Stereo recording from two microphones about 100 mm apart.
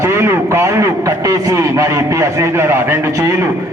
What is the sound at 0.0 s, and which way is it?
A man's voice, 25° right (ahead or behind).